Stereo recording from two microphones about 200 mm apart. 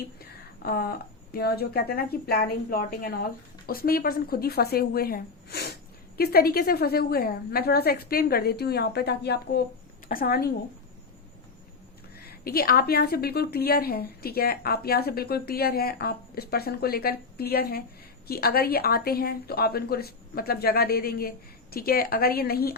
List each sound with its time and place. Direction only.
0.2 s a woman's voice: 50° left (ahead or behind)
12.1 s a woman's voice: 50° left (ahead or behind)